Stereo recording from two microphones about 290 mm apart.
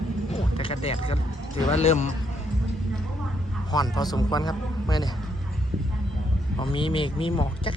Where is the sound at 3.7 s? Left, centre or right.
Centre.